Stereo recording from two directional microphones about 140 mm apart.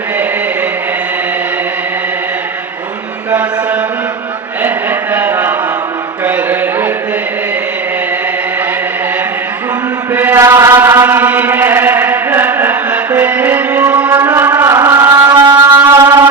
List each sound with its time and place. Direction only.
4.6 s a sound: 10° right (ahead or behind)
10.2 s chant: 15° right (ahead or behind)
15.4 s music: 15° right (ahead or behind)